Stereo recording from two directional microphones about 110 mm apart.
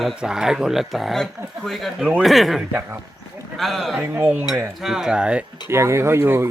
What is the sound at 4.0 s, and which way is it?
Speech, 15° right (ahead or behind).